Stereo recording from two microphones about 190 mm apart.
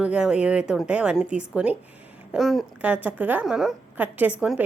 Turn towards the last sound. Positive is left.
turn(degrees=-10)  # may be behind; listen again after turning